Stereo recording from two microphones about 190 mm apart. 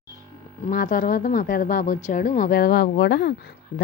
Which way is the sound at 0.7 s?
45° left (ahead or behind).